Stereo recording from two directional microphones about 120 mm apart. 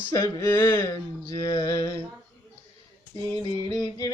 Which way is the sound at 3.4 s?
30° left (ahead or behind).